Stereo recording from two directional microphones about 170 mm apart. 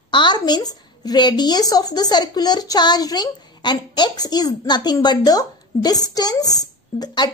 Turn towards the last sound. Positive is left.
turn(degrees=25)  # may be behind; listen again after turning